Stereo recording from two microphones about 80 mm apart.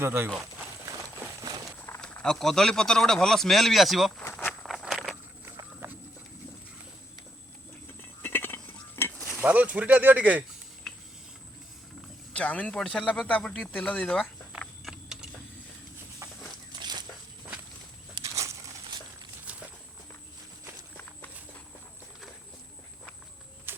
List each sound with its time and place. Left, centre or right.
0.0 s speech: right
2.0 s speech: centre
4.2 s walk: left
4.6 s a sound: centre
5.8 s pig: right
8.2 s dishes: left
9.4 s speech: centre
10.9 s a sound: centre
12.3 s speech: centre
14.8 s vehicle: centre
18.2 s a sound: right
19.5 s walk: centre
23.7 s a sound: right